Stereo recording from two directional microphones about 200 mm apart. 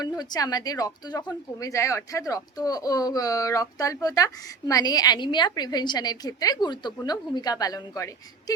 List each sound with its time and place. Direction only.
0.0 s speech: 20° left (ahead or behind)